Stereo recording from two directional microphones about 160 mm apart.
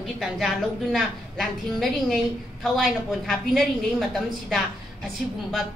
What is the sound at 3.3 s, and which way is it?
A woman's voice, 5° left (ahead or behind).